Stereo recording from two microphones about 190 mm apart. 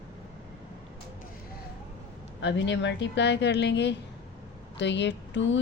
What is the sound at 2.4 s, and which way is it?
A woman's voice, 70° left (ahead or behind).